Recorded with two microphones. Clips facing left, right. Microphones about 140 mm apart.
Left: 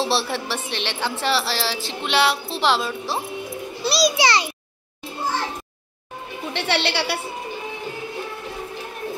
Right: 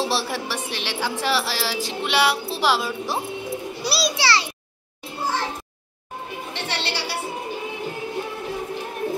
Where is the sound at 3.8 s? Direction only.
5° right (ahead or behind).